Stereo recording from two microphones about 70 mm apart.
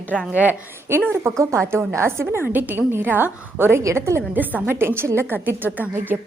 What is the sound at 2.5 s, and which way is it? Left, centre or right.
A woman's voice, right.